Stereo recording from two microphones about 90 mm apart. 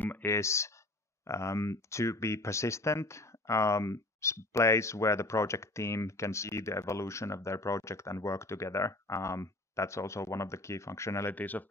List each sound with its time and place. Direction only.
0.0 s a sound: 20° left (ahead or behind)
0.3 s speech: 30° left (ahead or behind)
11.3 s speech: 20° left (ahead or behind)